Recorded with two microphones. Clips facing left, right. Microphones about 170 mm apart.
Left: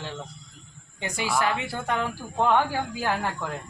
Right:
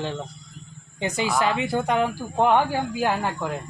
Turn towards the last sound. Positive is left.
turn(degrees=-15)  # may be behind; listen again after turning